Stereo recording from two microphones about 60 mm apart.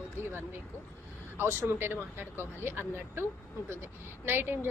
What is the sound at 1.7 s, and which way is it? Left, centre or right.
Speech, right.